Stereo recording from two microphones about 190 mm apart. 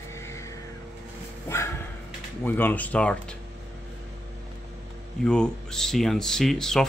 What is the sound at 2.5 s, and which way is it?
Speech, 10° left (ahead or behind).